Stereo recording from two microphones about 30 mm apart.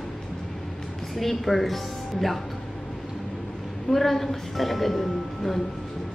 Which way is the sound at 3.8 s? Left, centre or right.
Centre.